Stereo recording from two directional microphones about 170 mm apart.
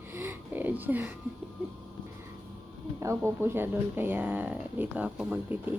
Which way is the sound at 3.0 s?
15° right (ahead or behind).